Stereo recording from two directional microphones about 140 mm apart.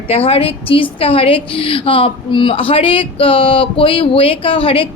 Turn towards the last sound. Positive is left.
turn(degrees=40)  # may be behind; listen again after turning